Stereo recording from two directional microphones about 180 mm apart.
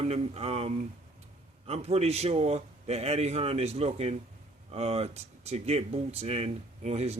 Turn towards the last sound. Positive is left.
turn(degrees=-35)  # may be behind; listen again after turning